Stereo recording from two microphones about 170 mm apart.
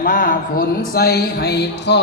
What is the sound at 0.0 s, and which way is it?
Speech, 55° left (ahead or behind).